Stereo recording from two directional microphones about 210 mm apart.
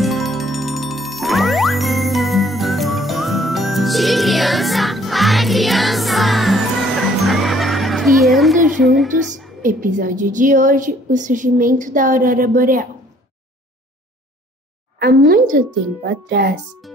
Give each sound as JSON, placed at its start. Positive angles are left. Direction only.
{"t": 0.0, "sound": "music", "side_deg": 0}
{"t": 8.8, "sound": "a woman's voice", "side_deg": 0}
{"t": 9.6, "sound": "a woman's voice", "side_deg": -40}
{"t": 15.0, "sound": "speech", "side_deg": -45}